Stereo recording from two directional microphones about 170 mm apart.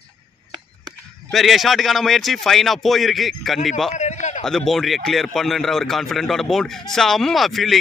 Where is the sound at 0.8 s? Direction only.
Centre (ahead or behind).